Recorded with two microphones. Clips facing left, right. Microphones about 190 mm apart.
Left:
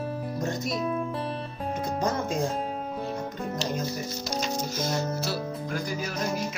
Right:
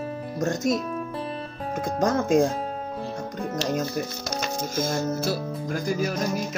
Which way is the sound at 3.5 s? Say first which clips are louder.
Right 6 dB; 55° right (ahead or behind).